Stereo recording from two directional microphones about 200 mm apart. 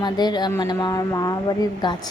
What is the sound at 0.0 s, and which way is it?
A woman's voice, 20° left (ahead or behind).